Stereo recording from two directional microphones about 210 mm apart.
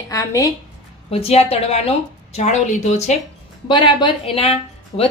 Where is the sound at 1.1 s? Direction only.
30° left (ahead or behind).